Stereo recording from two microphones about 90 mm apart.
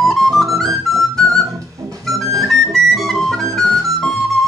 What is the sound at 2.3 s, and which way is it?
Music, centre (ahead or behind).